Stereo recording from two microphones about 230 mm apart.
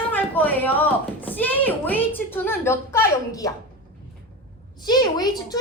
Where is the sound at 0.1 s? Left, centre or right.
Centre.